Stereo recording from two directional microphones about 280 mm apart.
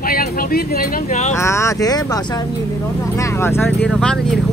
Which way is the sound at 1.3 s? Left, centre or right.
Centre.